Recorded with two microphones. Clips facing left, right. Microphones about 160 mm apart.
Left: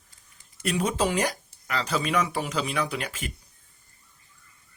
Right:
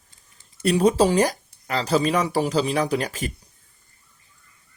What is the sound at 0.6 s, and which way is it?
Speech, 35° right (ahead or behind).